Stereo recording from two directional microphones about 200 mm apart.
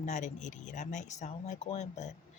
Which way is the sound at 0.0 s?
35° left (ahead or behind).